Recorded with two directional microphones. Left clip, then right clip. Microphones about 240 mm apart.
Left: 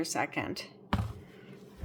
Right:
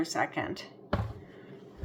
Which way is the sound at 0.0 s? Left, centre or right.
Left.